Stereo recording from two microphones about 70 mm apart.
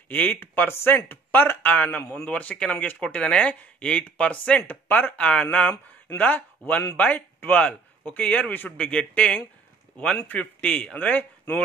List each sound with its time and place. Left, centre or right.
0.1 s speech: left